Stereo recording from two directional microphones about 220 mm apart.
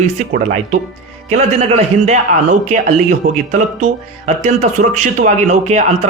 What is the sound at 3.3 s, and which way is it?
Speech, 35° right (ahead or behind).